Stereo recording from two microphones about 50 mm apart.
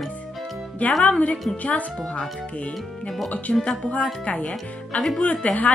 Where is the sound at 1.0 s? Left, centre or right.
Left.